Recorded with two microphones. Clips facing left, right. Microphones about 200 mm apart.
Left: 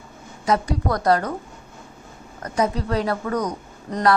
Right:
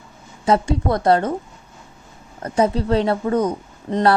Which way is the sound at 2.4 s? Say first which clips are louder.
Right 4 dB; 30° right (ahead or behind).